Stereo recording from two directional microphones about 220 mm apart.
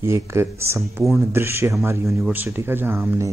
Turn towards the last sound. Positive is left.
turn(degrees=-10)  # may be behind; listen again after turning